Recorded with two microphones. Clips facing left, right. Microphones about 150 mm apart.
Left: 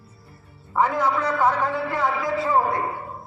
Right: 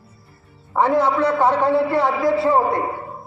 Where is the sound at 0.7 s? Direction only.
35° right (ahead or behind).